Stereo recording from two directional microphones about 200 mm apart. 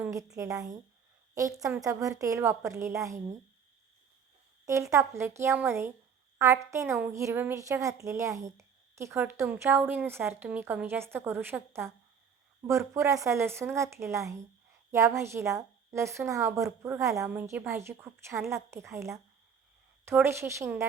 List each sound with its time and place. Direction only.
0.0 s a woman's voice: 15° right (ahead or behind)
4.6 s a woman's voice: 15° right (ahead or behind)